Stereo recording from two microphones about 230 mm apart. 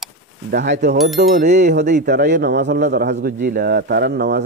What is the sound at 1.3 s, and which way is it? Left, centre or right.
Speech, right.